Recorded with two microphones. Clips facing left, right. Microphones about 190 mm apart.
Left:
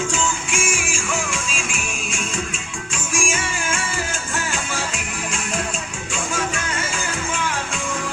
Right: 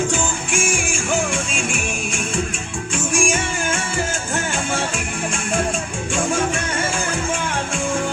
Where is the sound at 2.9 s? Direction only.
55° right (ahead or behind).